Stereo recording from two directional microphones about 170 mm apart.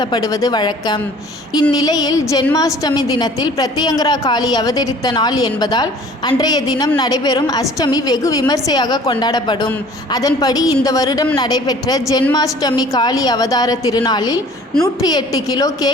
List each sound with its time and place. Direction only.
0.0 s a woman's voice: 25° left (ahead or behind)